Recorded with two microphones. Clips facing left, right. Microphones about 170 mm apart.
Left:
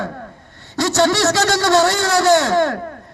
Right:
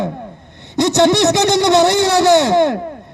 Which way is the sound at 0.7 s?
20° right (ahead or behind).